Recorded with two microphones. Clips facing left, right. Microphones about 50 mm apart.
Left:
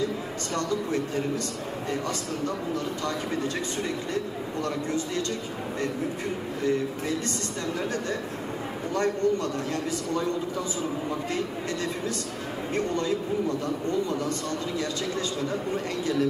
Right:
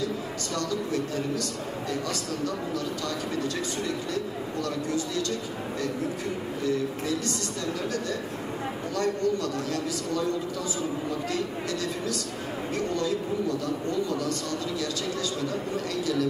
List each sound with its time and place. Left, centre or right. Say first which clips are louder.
0.6 s speech: left 2 dB; left
8.9 s speech: left 2 dB; left
12.7 s speech: left 1 dB; left
15.4 s speech: left 1 dB; left